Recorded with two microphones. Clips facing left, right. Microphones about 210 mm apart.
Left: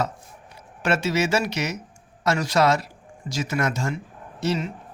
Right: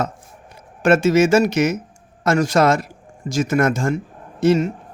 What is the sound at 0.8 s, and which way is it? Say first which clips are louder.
A man's voice: right 9 dB; 50° right (ahead or behind).